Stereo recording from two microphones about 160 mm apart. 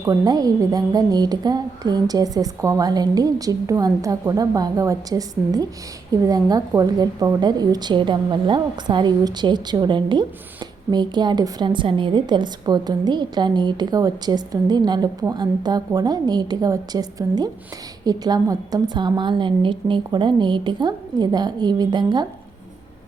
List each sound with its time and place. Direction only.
0.0 s a woman's voice: 20° right (ahead or behind)